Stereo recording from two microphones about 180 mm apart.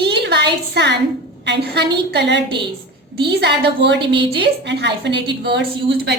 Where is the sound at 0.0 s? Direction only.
65° right (ahead or behind).